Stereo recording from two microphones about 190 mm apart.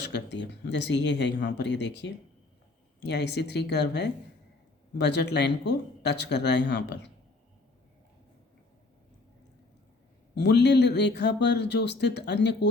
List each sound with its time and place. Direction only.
0.3 s speech: 65° left (ahead or behind)
10.3 s speech: 65° left (ahead or behind)